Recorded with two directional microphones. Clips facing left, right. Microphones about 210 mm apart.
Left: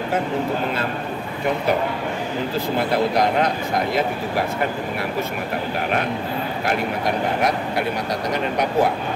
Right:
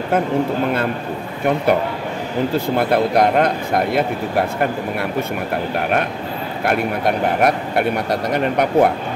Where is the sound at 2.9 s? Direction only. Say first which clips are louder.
Right 4 dB; 60° right (ahead or behind).